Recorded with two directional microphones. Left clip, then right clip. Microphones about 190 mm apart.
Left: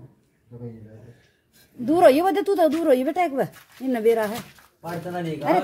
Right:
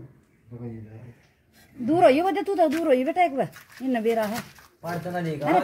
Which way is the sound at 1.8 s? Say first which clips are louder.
Left 2 dB; 25° left (ahead or behind).